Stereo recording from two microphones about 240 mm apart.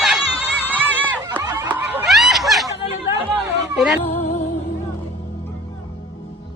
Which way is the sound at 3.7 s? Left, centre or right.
Centre.